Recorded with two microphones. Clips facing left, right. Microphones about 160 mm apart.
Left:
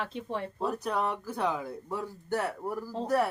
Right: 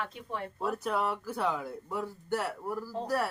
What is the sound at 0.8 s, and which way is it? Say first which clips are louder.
Speech: even; 5° right (ahead or behind).